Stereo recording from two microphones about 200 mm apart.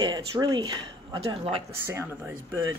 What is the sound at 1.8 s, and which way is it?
Speech, 10° right (ahead or behind).